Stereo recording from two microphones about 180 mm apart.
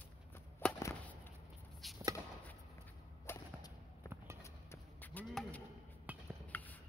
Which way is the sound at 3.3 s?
15° left (ahead or behind).